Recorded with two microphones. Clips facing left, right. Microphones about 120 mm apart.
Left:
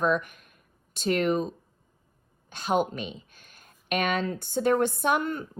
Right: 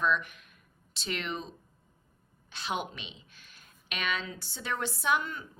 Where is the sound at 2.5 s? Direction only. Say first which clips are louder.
Left 9 dB; 45° left (ahead or behind).